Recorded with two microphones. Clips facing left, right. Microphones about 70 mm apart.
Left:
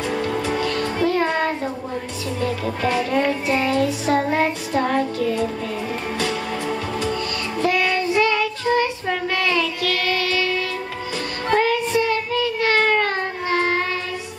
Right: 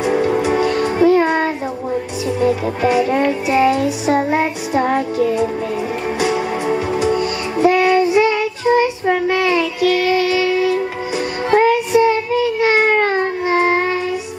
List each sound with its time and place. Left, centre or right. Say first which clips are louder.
0.0 s music: right 7 dB; centre
11.5 s child singing: right 6 dB; centre